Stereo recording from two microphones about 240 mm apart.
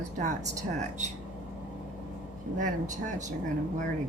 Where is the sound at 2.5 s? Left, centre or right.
Right.